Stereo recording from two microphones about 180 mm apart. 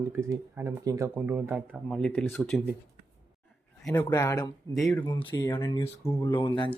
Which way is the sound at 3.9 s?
20° left (ahead or behind).